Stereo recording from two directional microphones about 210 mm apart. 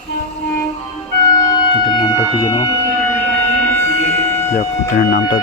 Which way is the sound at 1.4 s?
20° left (ahead or behind).